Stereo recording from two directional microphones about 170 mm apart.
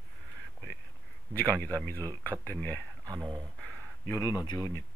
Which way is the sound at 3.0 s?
20° right (ahead or behind).